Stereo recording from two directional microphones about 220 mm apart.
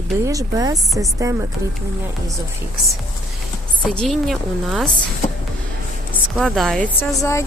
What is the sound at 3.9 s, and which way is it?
Speech, centre (ahead or behind).